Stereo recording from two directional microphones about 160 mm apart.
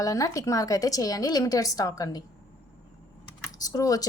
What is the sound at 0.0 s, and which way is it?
Speech, 20° left (ahead or behind).